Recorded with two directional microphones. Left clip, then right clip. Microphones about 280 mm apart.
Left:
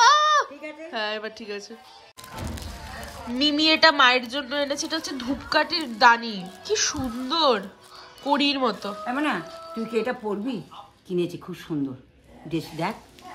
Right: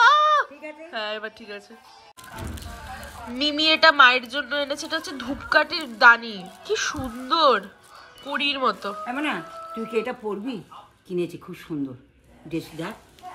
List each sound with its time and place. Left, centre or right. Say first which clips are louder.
0.0 s a sound: right 1 dB; centre
2.4 s speech: even; centre
12.4 s speech: left 3 dB; centre